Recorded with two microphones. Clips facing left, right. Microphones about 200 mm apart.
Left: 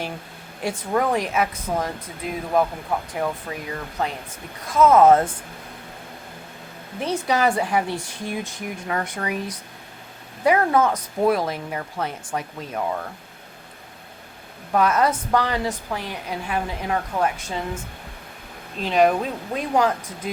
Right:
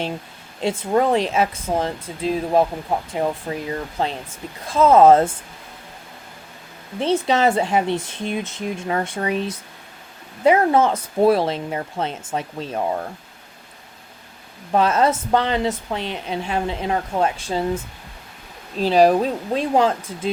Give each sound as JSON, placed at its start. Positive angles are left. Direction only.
{"t": 0.6, "sound": "speech", "side_deg": -25}
{"t": 7.0, "sound": "speech", "side_deg": -25}
{"t": 14.7, "sound": "speech", "side_deg": -25}
{"t": 18.8, "sound": "speech", "side_deg": -35}